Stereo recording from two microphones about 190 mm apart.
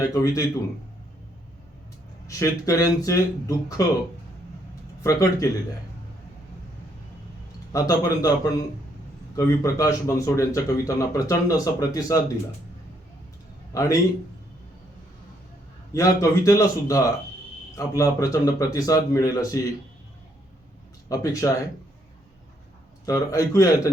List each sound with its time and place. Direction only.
0.1 s speech: 20° left (ahead or behind)
2.2 s a man's voice: 15° left (ahead or behind)
5.0 s a man's voice: 15° left (ahead or behind)
7.7 s a man's voice: 15° left (ahead or behind)
13.7 s a man's voice: 20° left (ahead or behind)
15.9 s a man's voice: 15° left (ahead or behind)
21.1 s a man's voice: 15° left (ahead or behind)
23.0 s a man's voice: 15° left (ahead or behind)